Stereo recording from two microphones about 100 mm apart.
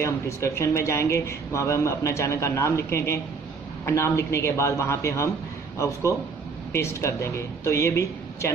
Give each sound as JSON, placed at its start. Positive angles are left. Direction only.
{"t": 0.0, "sound": "a man's voice", "side_deg": 30}